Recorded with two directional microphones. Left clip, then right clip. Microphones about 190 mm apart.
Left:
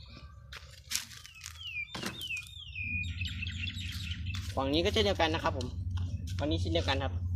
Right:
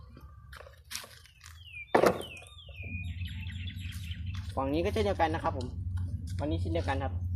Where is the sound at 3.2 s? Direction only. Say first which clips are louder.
Left 7 dB; 50° left (ahead or behind).